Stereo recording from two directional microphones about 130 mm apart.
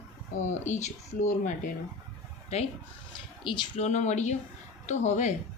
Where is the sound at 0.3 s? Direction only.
65° left (ahead or behind).